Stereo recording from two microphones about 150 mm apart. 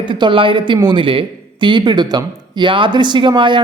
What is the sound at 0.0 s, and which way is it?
A man's voice, 35° right (ahead or behind).